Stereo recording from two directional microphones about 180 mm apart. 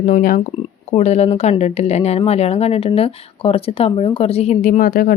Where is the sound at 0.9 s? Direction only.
35° left (ahead or behind).